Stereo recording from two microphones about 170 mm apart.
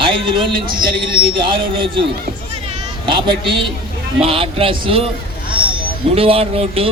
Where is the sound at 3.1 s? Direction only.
30° right (ahead or behind).